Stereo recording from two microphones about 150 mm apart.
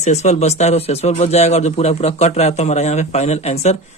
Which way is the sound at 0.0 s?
50° left (ahead or behind).